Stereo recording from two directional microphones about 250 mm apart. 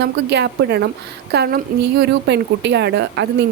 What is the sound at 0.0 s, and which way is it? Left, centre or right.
A woman's voice, right.